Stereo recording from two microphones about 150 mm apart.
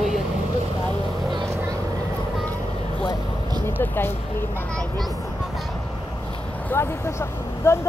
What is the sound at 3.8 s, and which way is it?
Speech, 15° left (ahead or behind).